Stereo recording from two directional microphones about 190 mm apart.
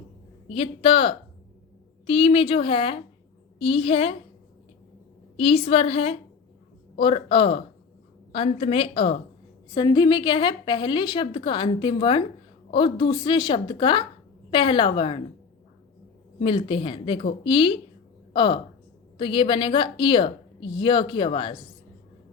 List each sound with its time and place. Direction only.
0.5 s a woman's voice: 30° left (ahead or behind)
5.4 s a woman's voice: 30° left (ahead or behind)
16.4 s a woman's voice: 30° left (ahead or behind)